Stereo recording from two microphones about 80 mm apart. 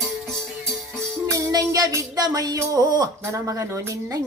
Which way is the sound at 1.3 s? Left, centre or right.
Right.